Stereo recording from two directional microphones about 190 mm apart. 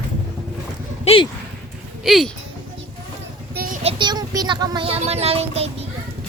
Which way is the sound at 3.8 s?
25° right (ahead or behind).